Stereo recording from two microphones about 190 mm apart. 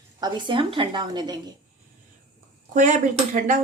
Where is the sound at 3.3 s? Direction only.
45° right (ahead or behind).